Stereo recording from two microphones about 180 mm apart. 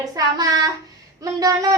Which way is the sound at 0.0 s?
20° right (ahead or behind).